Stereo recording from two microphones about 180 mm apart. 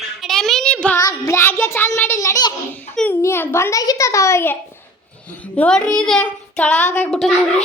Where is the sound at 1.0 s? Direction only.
15° left (ahead or behind).